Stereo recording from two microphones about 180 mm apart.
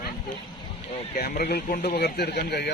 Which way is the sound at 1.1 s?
55° left (ahead or behind).